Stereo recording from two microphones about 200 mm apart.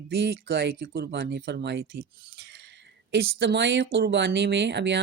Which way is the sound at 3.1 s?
60° right (ahead or behind).